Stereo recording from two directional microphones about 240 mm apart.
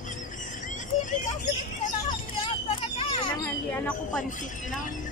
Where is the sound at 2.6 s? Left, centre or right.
Left.